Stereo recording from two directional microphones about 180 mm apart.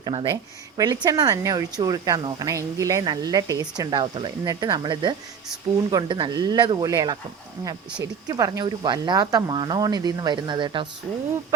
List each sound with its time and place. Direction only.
0.0 s a woman's voice: 25° right (ahead or behind)